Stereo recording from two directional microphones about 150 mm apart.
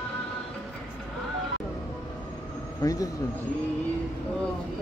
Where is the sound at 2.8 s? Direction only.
20° left (ahead or behind).